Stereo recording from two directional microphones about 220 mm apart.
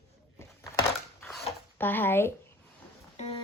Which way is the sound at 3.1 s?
30° left (ahead or behind).